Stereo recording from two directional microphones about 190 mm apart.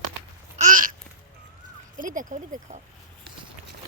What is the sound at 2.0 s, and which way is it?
Speech, 45° right (ahead or behind).